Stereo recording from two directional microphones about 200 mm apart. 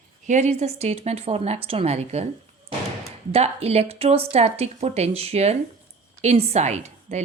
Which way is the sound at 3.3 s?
30° right (ahead or behind).